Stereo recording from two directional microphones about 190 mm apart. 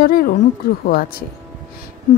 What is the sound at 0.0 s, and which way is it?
A woman's voice, 50° left (ahead or behind).